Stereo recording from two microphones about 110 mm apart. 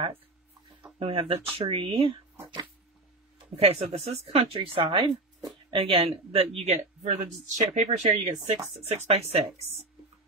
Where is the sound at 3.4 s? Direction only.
60° right (ahead or behind).